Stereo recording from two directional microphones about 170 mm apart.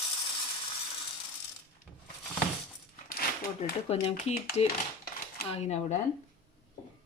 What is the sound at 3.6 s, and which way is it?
A woman's voice, 35° left (ahead or behind).